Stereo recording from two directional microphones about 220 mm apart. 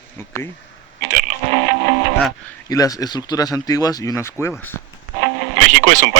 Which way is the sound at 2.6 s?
15° left (ahead or behind).